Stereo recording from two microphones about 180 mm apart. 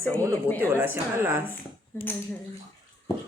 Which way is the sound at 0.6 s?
10° right (ahead or behind).